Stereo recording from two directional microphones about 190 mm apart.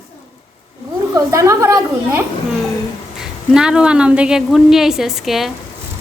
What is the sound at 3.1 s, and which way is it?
A woman's voice, 5° right (ahead or behind).